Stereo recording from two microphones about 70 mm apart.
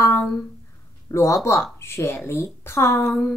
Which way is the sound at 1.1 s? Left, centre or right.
Left.